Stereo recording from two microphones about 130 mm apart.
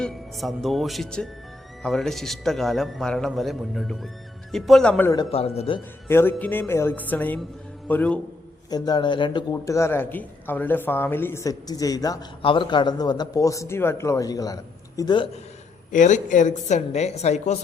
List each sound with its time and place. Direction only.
0.0 s a man's voice: centre (ahead or behind)
5.3 s speech: 50° left (ahead or behind)
6.1 s speech: 15° left (ahead or behind)
8.7 s a man's voice: 30° left (ahead or behind)
9.5 s speech: 25° left (ahead or behind)
12.4 s a man's voice: 40° left (ahead or behind)
15.9 s a woman's voice: 75° left (ahead or behind)